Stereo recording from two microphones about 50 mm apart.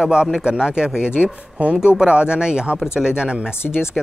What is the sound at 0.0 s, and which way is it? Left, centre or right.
Speech, centre.